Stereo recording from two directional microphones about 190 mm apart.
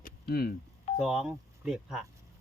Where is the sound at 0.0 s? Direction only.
55° left (ahead or behind).